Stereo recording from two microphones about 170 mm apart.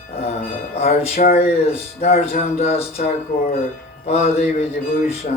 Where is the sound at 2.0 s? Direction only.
40° left (ahead or behind).